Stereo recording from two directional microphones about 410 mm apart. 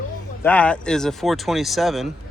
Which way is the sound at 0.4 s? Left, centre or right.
Centre.